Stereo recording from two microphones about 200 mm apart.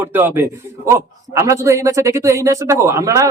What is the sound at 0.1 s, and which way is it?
Speech, 10° right (ahead or behind).